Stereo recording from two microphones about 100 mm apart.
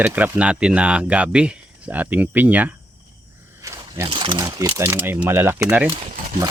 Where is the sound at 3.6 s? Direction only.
35° right (ahead or behind).